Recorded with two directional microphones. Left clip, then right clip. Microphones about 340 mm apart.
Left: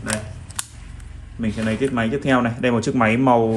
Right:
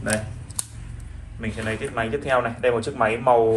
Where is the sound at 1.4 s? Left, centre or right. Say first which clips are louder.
Left 5 dB; left.